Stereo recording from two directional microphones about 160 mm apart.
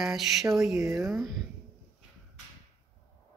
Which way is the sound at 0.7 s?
15° right (ahead or behind).